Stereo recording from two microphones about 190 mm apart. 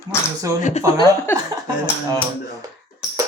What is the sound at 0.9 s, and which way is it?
Speech, 15° left (ahead or behind).